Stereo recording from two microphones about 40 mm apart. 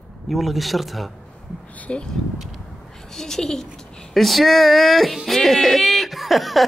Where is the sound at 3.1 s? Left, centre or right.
Centre.